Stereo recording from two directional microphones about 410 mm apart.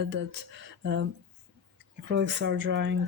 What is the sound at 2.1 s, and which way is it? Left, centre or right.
Speech, right.